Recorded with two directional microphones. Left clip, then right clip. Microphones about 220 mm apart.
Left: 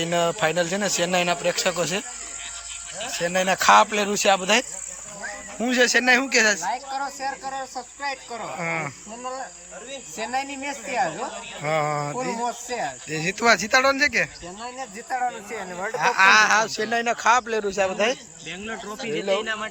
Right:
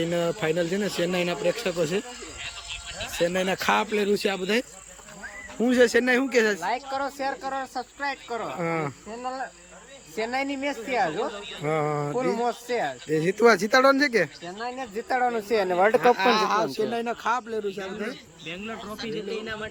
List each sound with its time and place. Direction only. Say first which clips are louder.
0.0 s speech: left 4 dB; 10° right (ahead or behind)
3.2 s speech: left 7 dB; 15° right (ahead or behind)
6.7 s speech: left 1 dB; 25° right (ahead or behind)
16.0 s speech: left 4 dB; 10° right (ahead or behind); by 18.1 s 10° left (ahead or behind)